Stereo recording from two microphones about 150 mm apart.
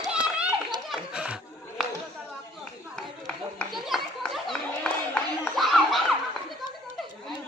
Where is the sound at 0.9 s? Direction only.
5° right (ahead or behind).